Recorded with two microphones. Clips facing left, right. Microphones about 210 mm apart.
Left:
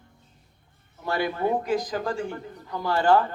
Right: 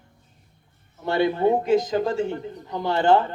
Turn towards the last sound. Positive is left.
turn(degrees=-25)  # may be behind; listen again after turning